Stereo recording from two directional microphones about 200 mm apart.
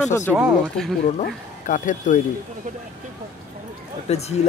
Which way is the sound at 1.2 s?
40° left (ahead or behind).